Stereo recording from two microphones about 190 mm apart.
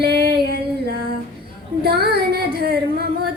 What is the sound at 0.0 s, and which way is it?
Music, 60° right (ahead or behind).